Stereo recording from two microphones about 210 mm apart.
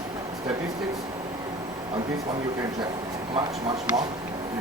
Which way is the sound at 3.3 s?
25° right (ahead or behind).